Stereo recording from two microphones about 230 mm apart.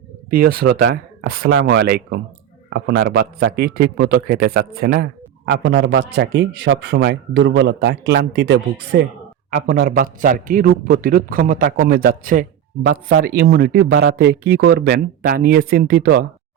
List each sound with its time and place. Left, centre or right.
0.3 s a man's voice: right